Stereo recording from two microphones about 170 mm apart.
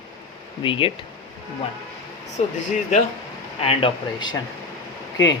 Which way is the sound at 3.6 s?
30° left (ahead or behind).